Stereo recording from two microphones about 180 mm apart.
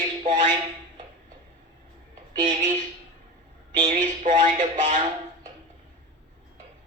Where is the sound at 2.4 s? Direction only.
45° right (ahead or behind).